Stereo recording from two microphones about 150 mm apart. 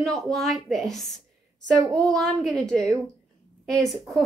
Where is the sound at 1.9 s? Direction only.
5° left (ahead or behind).